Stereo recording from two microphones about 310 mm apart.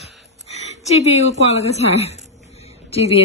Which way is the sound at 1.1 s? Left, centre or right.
Centre.